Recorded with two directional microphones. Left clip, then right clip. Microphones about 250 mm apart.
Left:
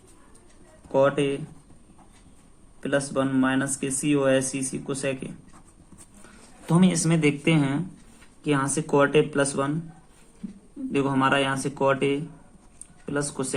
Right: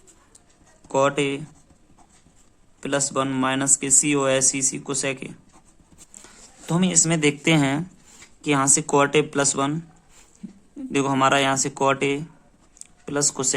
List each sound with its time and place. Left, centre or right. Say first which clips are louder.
0.9 s speech: right 1 dB; right
2.8 s speech: right 1 dB; right
6.7 s speech: right 2 dB; right
10.9 s speech: right 3 dB; right